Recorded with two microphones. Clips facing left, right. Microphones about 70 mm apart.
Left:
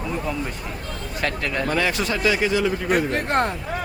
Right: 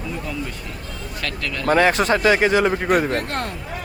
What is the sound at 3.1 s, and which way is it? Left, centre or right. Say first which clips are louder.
Speech: left 3 dB; left.